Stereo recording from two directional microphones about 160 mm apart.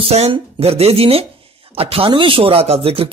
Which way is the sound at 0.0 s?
40° right (ahead or behind).